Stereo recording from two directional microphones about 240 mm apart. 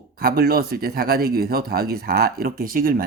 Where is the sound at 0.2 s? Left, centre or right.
Right.